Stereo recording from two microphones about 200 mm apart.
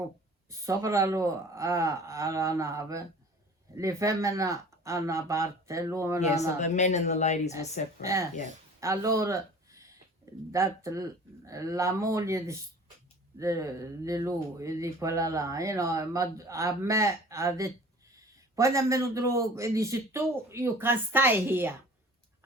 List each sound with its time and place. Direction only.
0.6 s speech: 15° right (ahead or behind)
6.6 s speech: 35° left (ahead or behind)
8.0 s speech: 15° right (ahead or behind)
8.8 s a sound: 15° right (ahead or behind)
10.5 s speech: 15° right (ahead or behind)